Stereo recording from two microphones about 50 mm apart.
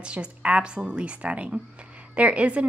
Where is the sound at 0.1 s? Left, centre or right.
Right.